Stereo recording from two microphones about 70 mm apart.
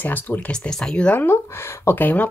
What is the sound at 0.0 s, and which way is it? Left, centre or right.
Speech, left.